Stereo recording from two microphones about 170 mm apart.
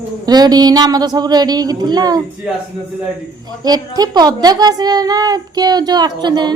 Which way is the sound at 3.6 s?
25° right (ahead or behind).